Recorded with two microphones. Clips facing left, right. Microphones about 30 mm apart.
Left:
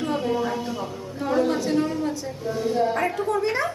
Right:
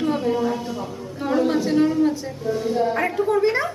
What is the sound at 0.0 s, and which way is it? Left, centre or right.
Speech, centre.